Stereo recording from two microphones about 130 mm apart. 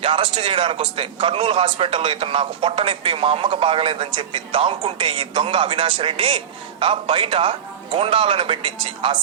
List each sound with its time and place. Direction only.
0.0 s a man's voice: 40° right (ahead or behind)